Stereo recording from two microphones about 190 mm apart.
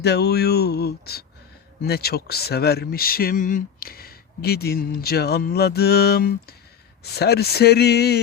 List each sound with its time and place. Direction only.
0.0 s speech: 60° left (ahead or behind)